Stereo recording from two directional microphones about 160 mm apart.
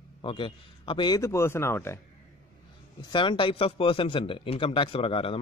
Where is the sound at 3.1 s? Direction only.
30° left (ahead or behind).